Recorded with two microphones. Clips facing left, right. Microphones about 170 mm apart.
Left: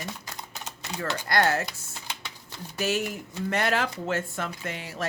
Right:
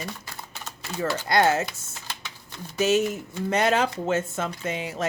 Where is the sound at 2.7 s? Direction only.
20° right (ahead or behind).